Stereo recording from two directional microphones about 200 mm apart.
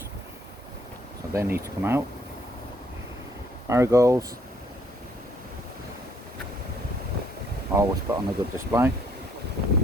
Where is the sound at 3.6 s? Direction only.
15° right (ahead or behind).